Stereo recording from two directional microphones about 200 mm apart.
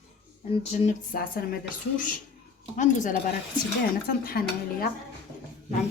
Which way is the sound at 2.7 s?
40° left (ahead or behind).